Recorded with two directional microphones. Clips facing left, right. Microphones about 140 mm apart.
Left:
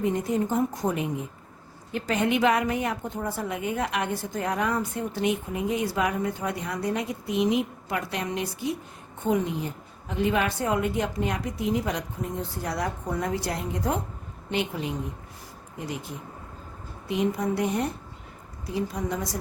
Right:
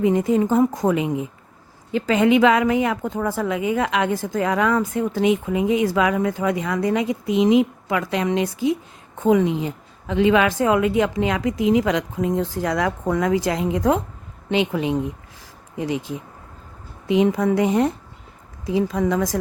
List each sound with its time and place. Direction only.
0.0 s a woman's voice: 90° right